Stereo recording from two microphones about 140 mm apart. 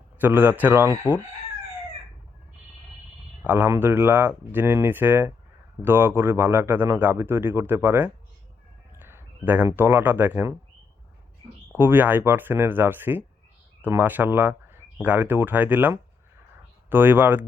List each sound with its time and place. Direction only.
0.2 s a man's voice: 15° right (ahead or behind)
3.4 s a man's voice: 15° right (ahead or behind)
11.8 s a man's voice: 15° right (ahead or behind)